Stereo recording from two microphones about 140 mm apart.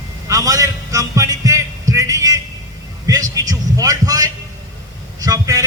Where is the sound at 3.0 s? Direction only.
25° right (ahead or behind).